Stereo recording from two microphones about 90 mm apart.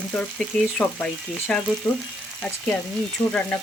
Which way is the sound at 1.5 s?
10° left (ahead or behind).